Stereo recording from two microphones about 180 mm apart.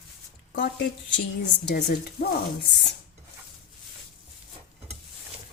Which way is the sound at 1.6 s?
65° left (ahead or behind).